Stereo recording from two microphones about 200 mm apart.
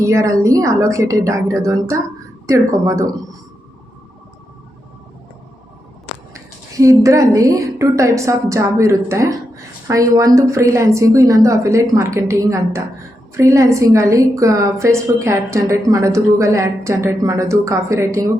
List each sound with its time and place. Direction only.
0.0 s a woman's voice: 15° right (ahead or behind)
6.3 s a woman's voice: 15° right (ahead or behind)